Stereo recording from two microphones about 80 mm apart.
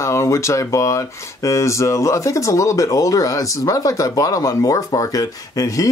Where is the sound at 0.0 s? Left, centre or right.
Left.